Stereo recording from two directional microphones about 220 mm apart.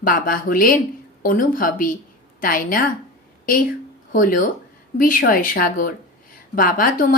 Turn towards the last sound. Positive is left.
turn(degrees=40)  # may be behind; listen again after turning